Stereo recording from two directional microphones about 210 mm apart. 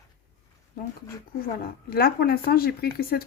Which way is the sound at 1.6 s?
45° left (ahead or behind).